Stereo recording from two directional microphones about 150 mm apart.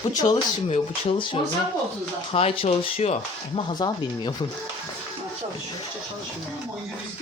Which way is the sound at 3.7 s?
30° left (ahead or behind).